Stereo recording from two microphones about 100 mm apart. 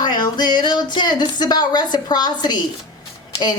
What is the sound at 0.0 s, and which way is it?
A woman's voice, 45° left (ahead or behind).